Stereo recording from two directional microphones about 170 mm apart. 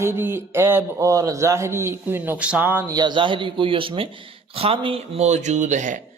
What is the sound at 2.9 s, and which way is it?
Speech, 25° right (ahead or behind).